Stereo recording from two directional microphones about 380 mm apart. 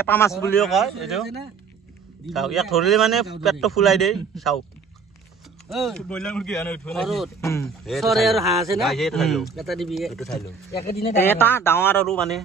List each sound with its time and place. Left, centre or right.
0.0 s speech: centre
2.2 s speech: centre
5.7 s speech: centre
10.8 s speech: left
11.1 s speech: centre